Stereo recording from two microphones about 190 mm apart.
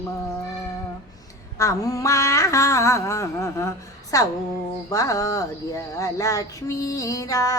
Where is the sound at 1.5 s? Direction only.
15° left (ahead or behind).